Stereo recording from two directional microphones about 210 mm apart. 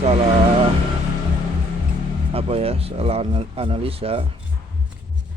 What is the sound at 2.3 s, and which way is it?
Speech, 30° right (ahead or behind).